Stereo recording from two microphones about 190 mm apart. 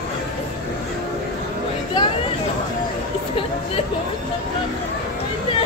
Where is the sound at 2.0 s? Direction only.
20° left (ahead or behind).